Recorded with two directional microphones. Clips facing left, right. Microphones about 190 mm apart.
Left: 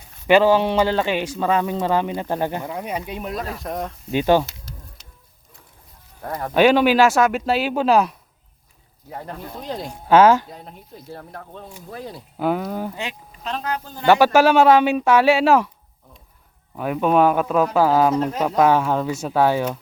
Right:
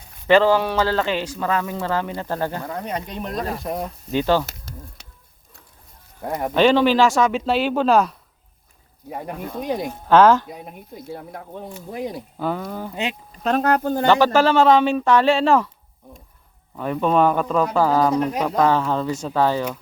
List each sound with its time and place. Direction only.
0.3 s speech: 15° left (ahead or behind)
3.6 s speech: 5° right (ahead or behind)
4.1 s speech: 15° left (ahead or behind)
4.4 s a sound: 50° right (ahead or behind)
6.2 s speech: 20° right (ahead or behind)
6.5 s speech: 10° left (ahead or behind)
9.0 s speech: 15° right (ahead or behind)
9.9 s speech: 10° left (ahead or behind)
10.5 s speech: 10° right (ahead or behind)
12.4 s speech: 15° left (ahead or behind)
12.9 s speech: 20° right (ahead or behind)
13.4 s speech: 50° right (ahead or behind)
14.0 s speech: 10° left (ahead or behind)
16.7 s speech: 10° left (ahead or behind)